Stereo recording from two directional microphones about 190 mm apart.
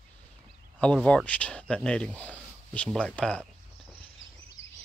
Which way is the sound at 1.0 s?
5° left (ahead or behind).